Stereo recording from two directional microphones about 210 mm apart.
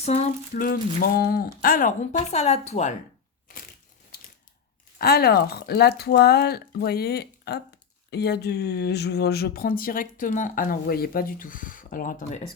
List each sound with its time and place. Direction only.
0.0 s a woman's voice: 30° left (ahead or behind)
4.9 s speech: 45° left (ahead or behind)